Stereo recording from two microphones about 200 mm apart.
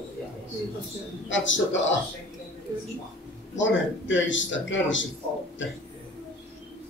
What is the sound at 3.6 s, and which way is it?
Speech, 70° left (ahead or behind).